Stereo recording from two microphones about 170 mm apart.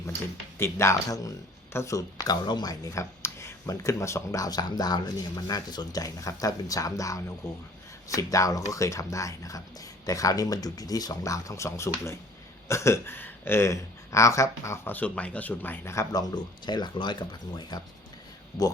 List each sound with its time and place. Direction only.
0.6 s speech: 15° left (ahead or behind)